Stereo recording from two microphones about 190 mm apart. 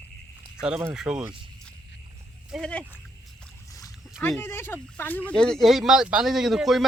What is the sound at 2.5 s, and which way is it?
Speech, 5° left (ahead or behind).